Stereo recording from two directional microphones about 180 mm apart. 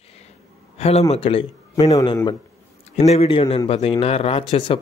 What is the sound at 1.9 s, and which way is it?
Speech, 20° left (ahead or behind).